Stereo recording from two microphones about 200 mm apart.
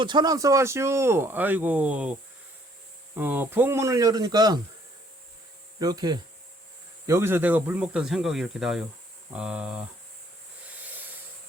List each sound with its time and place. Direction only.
0.0 s speech: 20° right (ahead or behind)
3.2 s speech: 10° right (ahead or behind)
5.8 s speech: 20° right (ahead or behind)